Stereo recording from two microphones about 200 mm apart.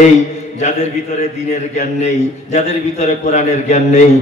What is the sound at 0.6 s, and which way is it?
A man's voice, 35° left (ahead or behind).